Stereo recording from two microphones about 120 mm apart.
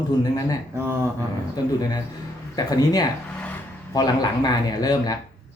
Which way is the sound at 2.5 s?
30° left (ahead or behind).